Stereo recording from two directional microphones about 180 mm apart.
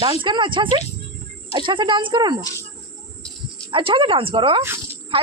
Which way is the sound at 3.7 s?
30° right (ahead or behind).